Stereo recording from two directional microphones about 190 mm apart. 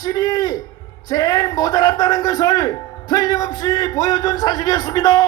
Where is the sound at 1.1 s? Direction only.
20° left (ahead or behind).